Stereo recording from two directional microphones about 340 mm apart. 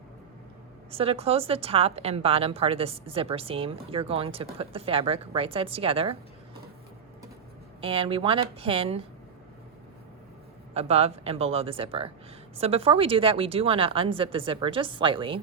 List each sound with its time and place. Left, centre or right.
0.9 s a woman's voice: centre
7.8 s a woman's voice: centre
10.8 s a woman's voice: centre